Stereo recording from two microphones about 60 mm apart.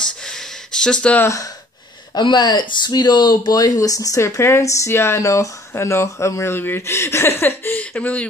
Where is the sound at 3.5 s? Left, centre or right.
Left.